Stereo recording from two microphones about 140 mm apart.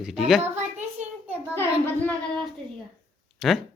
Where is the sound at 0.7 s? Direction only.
55° right (ahead or behind).